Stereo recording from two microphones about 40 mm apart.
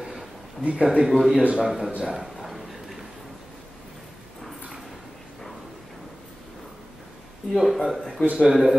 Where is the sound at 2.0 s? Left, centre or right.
Centre.